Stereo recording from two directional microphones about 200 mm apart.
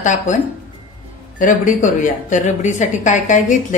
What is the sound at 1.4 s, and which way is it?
A woman's voice, 40° left (ahead or behind).